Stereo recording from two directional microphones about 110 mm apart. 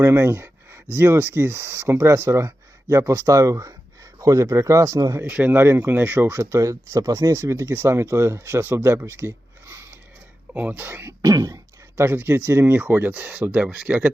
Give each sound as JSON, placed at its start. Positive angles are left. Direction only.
{"t": 0.0, "sound": "a sound", "side_deg": -20}
{"t": 0.9, "sound": "speech", "side_deg": -20}
{"t": 5.2, "sound": "speech", "side_deg": -15}
{"t": 10.5, "sound": "speech", "side_deg": -15}
{"t": 12.0, "sound": "speech", "side_deg": -20}